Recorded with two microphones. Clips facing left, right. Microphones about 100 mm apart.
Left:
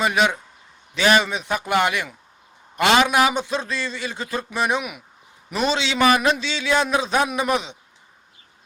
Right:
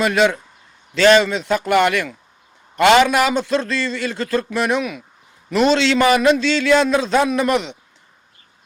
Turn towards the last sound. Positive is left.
turn(degrees=10)  # may be behind; listen again after turning